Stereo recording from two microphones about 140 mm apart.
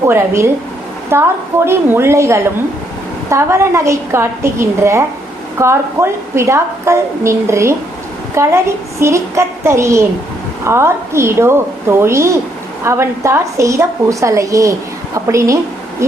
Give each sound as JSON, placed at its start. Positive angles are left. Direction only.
{"t": 0.0, "sound": "a woman's voice", "side_deg": -20}